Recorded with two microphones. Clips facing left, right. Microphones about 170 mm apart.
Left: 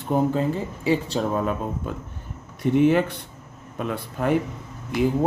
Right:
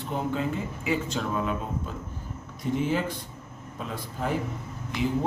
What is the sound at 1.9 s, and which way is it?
Speech, 60° left (ahead or behind).